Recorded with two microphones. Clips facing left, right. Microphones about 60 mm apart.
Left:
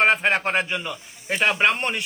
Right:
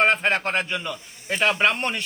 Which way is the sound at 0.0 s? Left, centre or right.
Centre.